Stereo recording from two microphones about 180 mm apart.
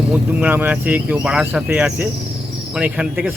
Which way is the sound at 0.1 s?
10° right (ahead or behind).